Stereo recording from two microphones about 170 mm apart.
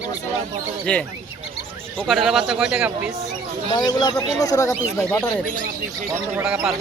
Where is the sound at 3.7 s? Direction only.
25° left (ahead or behind).